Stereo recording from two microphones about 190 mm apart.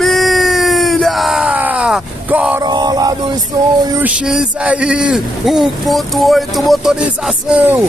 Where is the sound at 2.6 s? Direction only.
20° right (ahead or behind).